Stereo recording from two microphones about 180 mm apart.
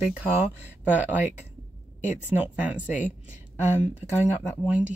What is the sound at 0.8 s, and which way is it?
Speech, 10° right (ahead or behind).